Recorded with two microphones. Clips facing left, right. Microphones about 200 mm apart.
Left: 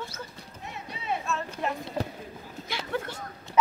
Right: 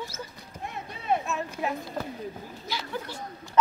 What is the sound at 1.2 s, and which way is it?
Speech, 10° right (ahead or behind).